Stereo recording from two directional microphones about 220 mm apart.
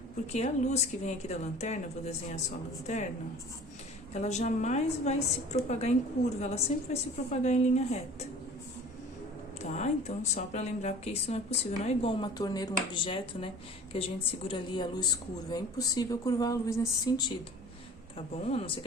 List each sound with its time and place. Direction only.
0.3 s a woman's voice: 30° left (ahead or behind)
4.1 s a woman's voice: 30° left (ahead or behind)
9.6 s a woman's voice: 30° left (ahead or behind)
18.5 s a woman's voice: 25° left (ahead or behind)